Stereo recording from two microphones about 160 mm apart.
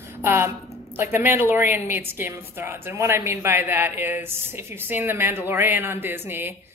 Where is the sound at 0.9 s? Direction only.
15° right (ahead or behind).